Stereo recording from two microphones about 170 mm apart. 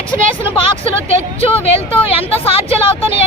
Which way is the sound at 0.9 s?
35° left (ahead or behind).